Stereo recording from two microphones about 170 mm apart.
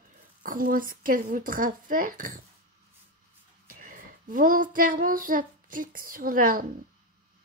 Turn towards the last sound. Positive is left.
turn(degrees=-55)  # may be behind; listen again after turning